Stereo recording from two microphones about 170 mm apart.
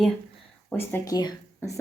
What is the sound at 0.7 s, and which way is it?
Speech, 15° left (ahead or behind).